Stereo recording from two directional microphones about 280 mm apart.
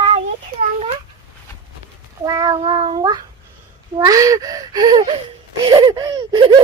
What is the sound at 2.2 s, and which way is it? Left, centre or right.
Speech, centre.